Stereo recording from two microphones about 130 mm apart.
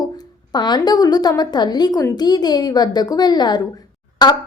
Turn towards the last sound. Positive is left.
turn(degrees=35)  # may be behind; listen again after turning